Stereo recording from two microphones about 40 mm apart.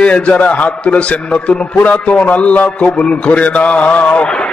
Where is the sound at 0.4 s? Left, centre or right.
Left.